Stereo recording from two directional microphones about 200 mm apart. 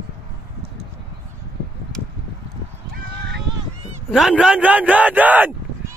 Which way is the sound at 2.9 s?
60° right (ahead or behind).